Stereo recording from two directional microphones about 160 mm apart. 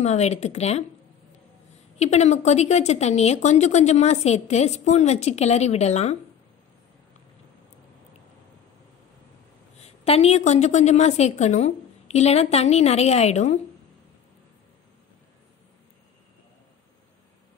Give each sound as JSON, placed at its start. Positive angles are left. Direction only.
{"t": 0.0, "sound": "a woman's voice", "side_deg": 45}
{"t": 2.0, "sound": "a woman's voice", "side_deg": 45}
{"t": 9.8, "sound": "a woman's voice", "side_deg": 40}